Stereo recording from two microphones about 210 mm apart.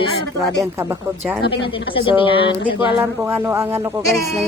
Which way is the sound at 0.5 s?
15° right (ahead or behind).